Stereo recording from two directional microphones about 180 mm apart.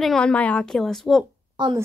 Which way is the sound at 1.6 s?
25° right (ahead or behind).